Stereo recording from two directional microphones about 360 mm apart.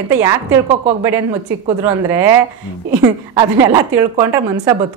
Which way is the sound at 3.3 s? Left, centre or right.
Centre.